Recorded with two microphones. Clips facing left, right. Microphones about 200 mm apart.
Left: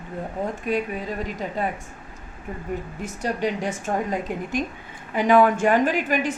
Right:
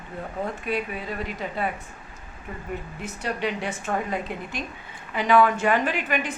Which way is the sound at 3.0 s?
45° left (ahead or behind).